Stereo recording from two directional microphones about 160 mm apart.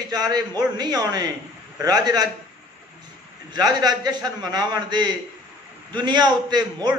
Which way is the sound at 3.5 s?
25° right (ahead or behind).